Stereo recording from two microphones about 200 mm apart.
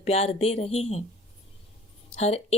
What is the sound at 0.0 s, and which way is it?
Speech, 30° left (ahead or behind).